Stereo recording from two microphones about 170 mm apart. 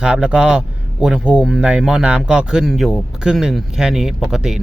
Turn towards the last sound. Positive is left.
turn(degrees=-5)  # may be behind; listen again after turning